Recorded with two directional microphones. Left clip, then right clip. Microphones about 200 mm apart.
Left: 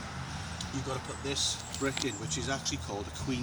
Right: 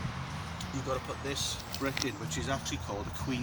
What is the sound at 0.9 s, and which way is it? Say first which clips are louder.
Speech: right 3 dB; 10° right (ahead or behind).